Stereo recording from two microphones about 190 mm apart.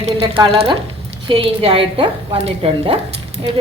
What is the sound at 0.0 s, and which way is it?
A woman's voice, 30° right (ahead or behind).